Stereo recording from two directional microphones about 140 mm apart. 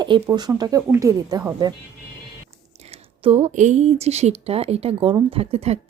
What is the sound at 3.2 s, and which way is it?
Speech, 45° right (ahead or behind).